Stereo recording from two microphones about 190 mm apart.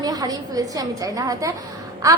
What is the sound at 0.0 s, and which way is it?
A woman's voice, 20° right (ahead or behind).